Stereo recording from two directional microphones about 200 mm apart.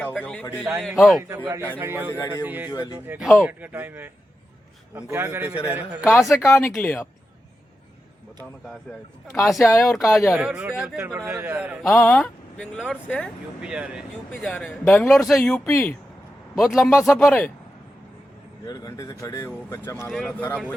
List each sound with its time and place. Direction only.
0.0 s a man's voice: centre (ahead or behind)
1.4 s speech: 15° right (ahead or behind)
2.6 s speech: 20° left (ahead or behind)
3.1 s speech: centre (ahead or behind)
6.3 s speech: 15° left (ahead or behind)
9.4 s a man's voice: centre (ahead or behind)
13.6 s a man's voice: 5° right (ahead or behind)
14.3 s a man's voice: 5° left (ahead or behind)
16.9 s speech: 15° left (ahead or behind)
17.2 s a man's voice: 5° left (ahead or behind)
18.6 s speech: 20° left (ahead or behind)
20.1 s a man's voice: centre (ahead or behind)